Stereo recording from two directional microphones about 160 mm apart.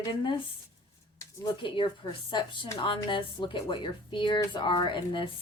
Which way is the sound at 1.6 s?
30° left (ahead or behind).